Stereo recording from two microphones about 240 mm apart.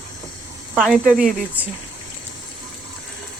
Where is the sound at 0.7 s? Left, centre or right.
Centre.